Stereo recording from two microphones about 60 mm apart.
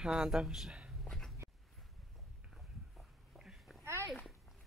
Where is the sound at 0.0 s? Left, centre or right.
Centre.